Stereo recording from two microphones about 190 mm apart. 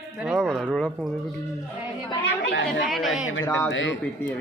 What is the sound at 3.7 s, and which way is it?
Speech, 80° left.